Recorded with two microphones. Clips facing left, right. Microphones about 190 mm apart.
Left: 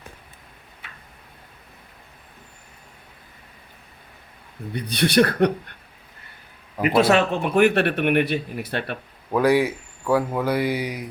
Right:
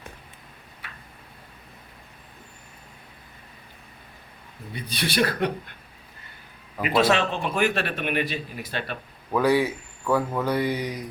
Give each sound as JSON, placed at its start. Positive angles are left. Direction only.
{"t": 4.7, "sound": "speech", "side_deg": 60}
{"t": 6.7, "sound": "a man's voice", "side_deg": 15}
{"t": 7.4, "sound": "speech", "side_deg": 55}
{"t": 9.3, "sound": "speech", "side_deg": 10}